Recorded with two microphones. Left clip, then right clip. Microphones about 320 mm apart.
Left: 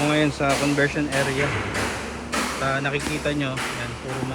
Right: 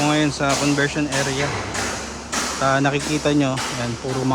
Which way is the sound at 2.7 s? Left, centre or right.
Centre.